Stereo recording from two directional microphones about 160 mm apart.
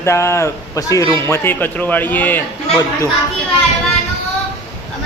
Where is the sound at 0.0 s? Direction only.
15° left (ahead or behind).